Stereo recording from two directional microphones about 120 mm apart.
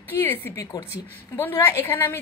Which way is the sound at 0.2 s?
15° left (ahead or behind).